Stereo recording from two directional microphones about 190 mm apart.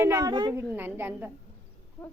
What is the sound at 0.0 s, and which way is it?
Speech, 15° right (ahead or behind).